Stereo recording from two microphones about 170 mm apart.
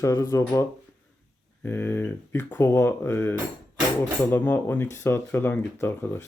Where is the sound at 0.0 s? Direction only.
20° left (ahead or behind).